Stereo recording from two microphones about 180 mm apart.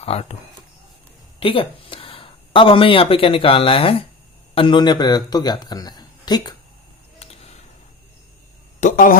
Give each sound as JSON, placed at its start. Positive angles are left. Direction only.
{"t": 0.0, "sound": "speech", "side_deg": 35}
{"t": 1.4, "sound": "a man's voice", "side_deg": 30}
{"t": 7.2, "sound": "a sound", "side_deg": 35}
{"t": 8.8, "sound": "speech", "side_deg": 45}